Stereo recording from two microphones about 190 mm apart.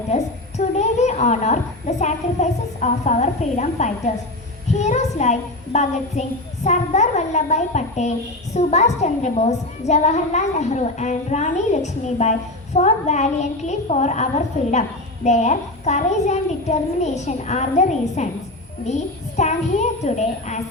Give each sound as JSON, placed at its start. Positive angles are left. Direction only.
{"t": 0.1, "sound": "a woman's voice", "side_deg": 35}
{"t": 19.4, "sound": "a woman's voice", "side_deg": 35}